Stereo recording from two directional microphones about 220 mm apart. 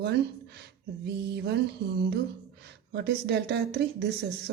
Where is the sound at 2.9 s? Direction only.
50° right (ahead or behind).